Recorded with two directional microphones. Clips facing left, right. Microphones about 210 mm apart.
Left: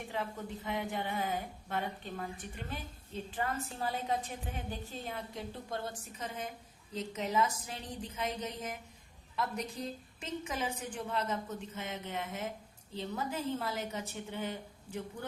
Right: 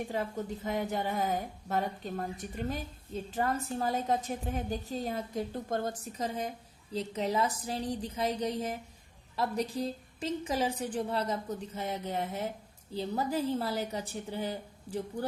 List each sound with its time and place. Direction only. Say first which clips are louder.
0.1 s a woman's voice: right 5 dB; 40° right (ahead or behind)